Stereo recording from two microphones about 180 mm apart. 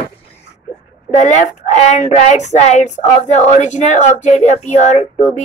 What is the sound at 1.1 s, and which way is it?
Speech, 40° left (ahead or behind).